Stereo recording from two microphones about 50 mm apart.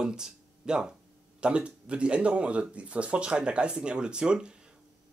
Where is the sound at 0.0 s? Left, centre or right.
Centre.